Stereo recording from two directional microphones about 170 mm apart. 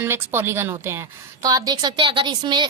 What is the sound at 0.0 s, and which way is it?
A woman's voice, 10° right (ahead or behind).